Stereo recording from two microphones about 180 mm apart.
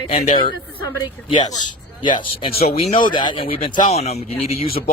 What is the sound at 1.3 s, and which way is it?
Speech, 25° left (ahead or behind).